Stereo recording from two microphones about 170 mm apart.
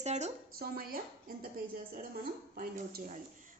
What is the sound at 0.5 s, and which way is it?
Speech, 60° right (ahead or behind).